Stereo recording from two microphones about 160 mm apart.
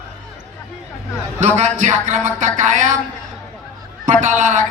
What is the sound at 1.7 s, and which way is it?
Speech, 50° right (ahead or behind).